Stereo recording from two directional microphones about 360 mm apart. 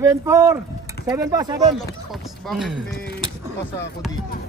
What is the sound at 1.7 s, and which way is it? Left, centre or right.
Speech, centre.